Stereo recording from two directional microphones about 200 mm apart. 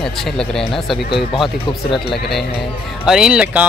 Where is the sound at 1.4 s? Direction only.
25° left (ahead or behind).